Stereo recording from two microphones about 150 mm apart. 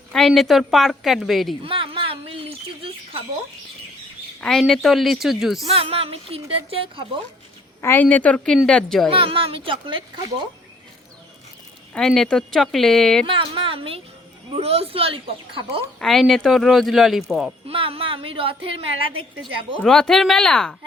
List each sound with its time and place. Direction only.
0.1 s speech: centre (ahead or behind)
1.6 s speech: 35° right (ahead or behind)
4.4 s speech: 5° left (ahead or behind)
5.6 s speech: 40° right (ahead or behind)
7.8 s a woman's voice: 15° left (ahead or behind)
9.1 s speech: 35° right (ahead or behind)
11.9 s speech: 5° left (ahead or behind)
13.2 s speech: 35° right (ahead or behind)
16.0 s speech: centre (ahead or behind)
17.7 s speech: 40° right (ahead or behind)
19.8 s speech: 5° left (ahead or behind)